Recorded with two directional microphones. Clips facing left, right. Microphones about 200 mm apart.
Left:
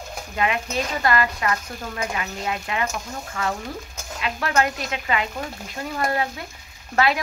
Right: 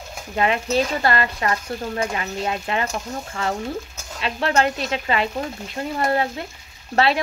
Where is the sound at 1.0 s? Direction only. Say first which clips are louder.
Right 1 dB; 30° right (ahead or behind).